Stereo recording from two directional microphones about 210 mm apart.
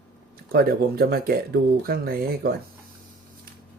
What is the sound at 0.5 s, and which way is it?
Speech, 45° right (ahead or behind).